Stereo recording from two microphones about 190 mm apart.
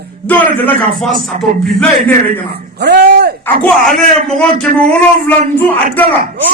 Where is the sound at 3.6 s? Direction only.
Centre (ahead or behind).